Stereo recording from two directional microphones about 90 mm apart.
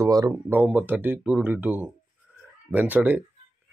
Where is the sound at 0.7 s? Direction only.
15° right (ahead or behind).